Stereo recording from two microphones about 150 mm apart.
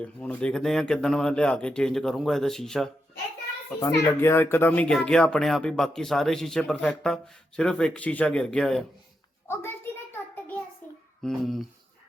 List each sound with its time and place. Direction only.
0.0 s speech: 10° left (ahead or behind)
3.8 s speech: 15° left (ahead or behind)
9.5 s a sound: 15° left (ahead or behind)
10.8 s child singing: 10° left (ahead or behind)
11.2 s speech: centre (ahead or behind)